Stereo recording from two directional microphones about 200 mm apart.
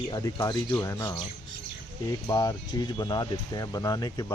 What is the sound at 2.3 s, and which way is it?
Speech, 20° left (ahead or behind).